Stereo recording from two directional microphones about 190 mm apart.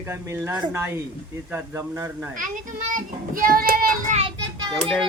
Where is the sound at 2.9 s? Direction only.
50° right (ahead or behind).